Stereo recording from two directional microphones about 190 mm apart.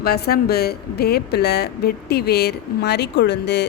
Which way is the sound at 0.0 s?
55° left (ahead or behind).